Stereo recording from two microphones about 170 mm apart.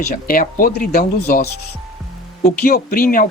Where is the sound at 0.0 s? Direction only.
55° left (ahead or behind).